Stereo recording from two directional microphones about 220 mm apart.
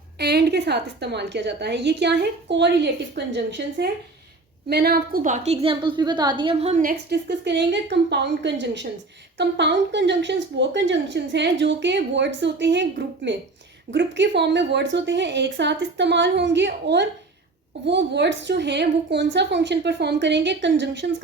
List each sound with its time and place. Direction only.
0.2 s a woman's voice: 45° right (ahead or behind); by 6.9 s 30° right (ahead or behind)
7.1 s a woman's voice: 50° right (ahead or behind)